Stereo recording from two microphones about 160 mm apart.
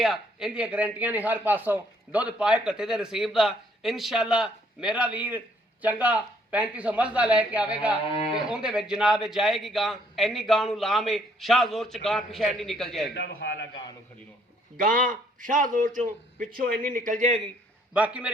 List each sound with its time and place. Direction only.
0.0 s speech: 5° right (ahead or behind)
8.1 s speech: 35° left (ahead or behind)
8.4 s speech: 5° right (ahead or behind)
13.1 s a man's voice: 90° left
14.8 s a man's voice: 60° right (ahead or behind)
16.6 s a man's voice: 65° right (ahead or behind); by 17.4 s 50° right (ahead or behind)
17.9 s speech: 10° right (ahead or behind)